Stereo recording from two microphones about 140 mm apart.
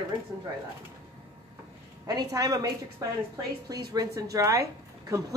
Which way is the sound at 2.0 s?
25° right (ahead or behind).